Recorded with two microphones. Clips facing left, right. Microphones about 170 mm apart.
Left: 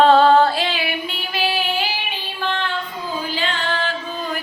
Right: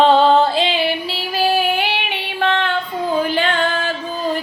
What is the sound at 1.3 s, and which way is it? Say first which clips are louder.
Female singing: right 5 dB; 45° right (ahead or behind).